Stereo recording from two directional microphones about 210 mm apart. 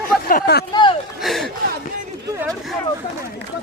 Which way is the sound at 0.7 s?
20° left (ahead or behind).